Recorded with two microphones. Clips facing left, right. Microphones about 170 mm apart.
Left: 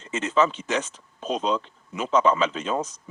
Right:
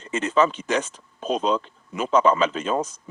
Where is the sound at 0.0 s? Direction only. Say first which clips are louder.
Right 2 dB; 55° right (ahead or behind).